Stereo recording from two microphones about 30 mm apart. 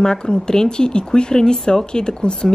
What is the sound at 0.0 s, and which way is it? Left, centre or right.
Speech, left.